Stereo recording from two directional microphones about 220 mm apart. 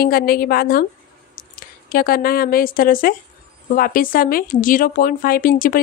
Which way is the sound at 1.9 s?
40° left (ahead or behind).